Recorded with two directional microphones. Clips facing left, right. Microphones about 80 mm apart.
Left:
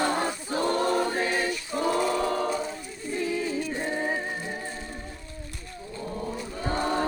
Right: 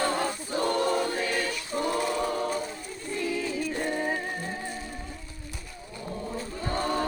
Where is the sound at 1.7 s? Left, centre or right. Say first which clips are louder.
Left 1 dB; left.